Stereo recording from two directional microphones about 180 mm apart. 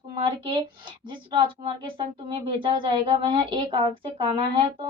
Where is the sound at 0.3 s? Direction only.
30° right (ahead or behind).